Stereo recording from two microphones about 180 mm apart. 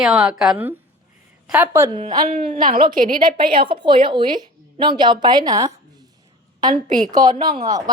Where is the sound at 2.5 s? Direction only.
50° right (ahead or behind).